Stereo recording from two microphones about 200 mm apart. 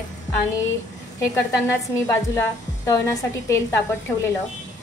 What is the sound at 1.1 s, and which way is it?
A woman's voice, 15° left (ahead or behind).